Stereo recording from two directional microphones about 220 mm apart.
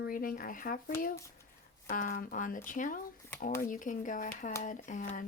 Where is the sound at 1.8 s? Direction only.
35° left (ahead or behind).